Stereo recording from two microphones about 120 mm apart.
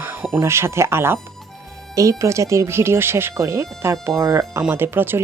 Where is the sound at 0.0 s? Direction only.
15° right (ahead or behind).